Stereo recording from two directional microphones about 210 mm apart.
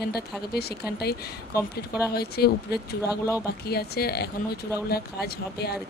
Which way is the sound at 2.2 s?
50° left (ahead or behind).